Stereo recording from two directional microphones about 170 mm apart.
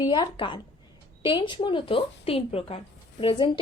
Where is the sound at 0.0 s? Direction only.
25° left (ahead or behind).